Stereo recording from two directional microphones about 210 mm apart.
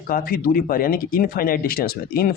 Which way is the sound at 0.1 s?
45° left (ahead or behind).